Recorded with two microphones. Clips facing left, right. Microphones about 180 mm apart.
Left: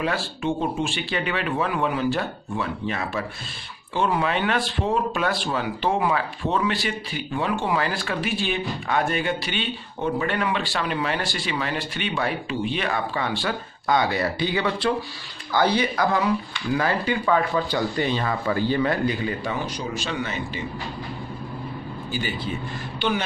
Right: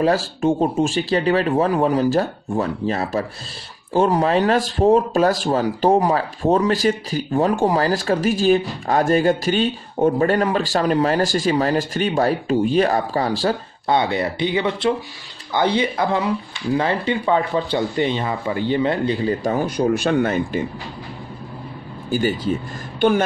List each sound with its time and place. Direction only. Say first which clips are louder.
0.0 s speech: right 8 dB; 40° right (ahead or behind)
22.1 s speech: right 9 dB; 45° right (ahead or behind)